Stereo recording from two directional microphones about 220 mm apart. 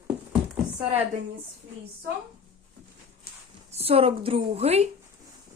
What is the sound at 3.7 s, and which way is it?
A woman's voice, 25° right (ahead or behind).